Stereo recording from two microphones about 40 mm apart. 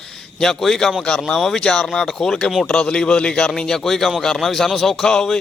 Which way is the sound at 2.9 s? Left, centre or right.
Left.